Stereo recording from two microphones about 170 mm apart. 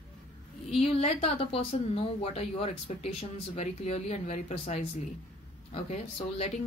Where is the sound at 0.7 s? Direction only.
35° left (ahead or behind).